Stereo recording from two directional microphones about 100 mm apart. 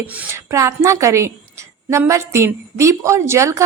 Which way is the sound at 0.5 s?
30° right (ahead or behind).